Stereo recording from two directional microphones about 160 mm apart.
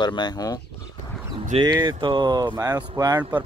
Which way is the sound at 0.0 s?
25° left (ahead or behind).